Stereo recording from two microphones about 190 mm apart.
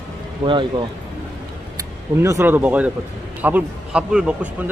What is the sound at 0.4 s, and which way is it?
Speech, 25° right (ahead or behind).